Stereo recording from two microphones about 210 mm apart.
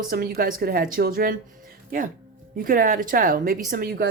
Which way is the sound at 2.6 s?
40° right (ahead or behind).